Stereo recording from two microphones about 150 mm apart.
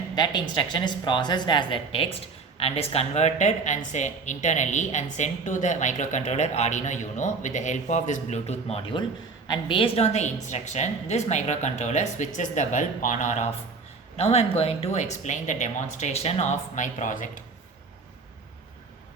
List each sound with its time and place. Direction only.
0.2 s speech: 30° left (ahead or behind); by 8.8 s 50° left (ahead or behind)
9.5 s speech: 35° left (ahead or behind); by 13.5 s 55° left (ahead or behind)
14.2 s speech: 45° left (ahead or behind); by 17.4 s 60° left (ahead or behind)